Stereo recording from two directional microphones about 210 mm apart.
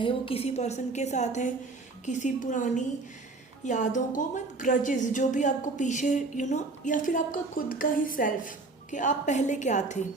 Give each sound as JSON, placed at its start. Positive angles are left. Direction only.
{"t": 0.0, "sound": "a woman's voice", "side_deg": 25}